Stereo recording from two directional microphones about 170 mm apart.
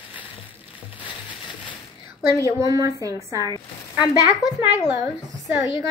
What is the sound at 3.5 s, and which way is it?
Speech, 25° left (ahead or behind).